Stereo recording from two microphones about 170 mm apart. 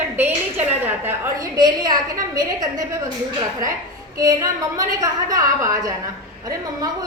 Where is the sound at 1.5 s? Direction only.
25° right (ahead or behind).